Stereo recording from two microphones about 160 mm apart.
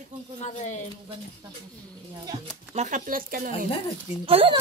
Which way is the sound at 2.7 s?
50° right (ahead or behind).